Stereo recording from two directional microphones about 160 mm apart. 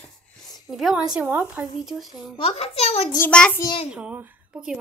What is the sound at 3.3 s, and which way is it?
Speech, 5° left (ahead or behind).